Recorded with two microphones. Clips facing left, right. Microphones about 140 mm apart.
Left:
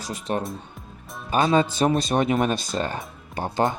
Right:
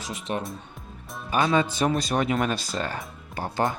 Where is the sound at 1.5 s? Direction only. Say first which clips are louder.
Left 3 dB; 25° left (ahead or behind).